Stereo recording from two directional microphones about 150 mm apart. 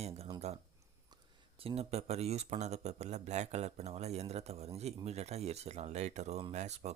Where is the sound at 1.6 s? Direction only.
40° right (ahead or behind).